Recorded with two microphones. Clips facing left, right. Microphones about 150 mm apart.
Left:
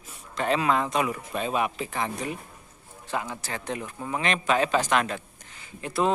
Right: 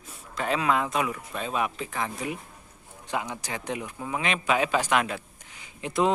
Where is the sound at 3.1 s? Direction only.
15° right (ahead or behind).